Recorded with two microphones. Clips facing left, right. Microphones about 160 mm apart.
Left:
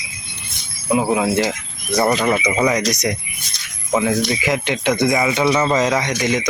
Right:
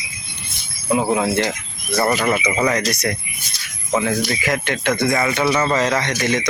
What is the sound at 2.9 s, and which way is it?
Speech, 20° left (ahead or behind).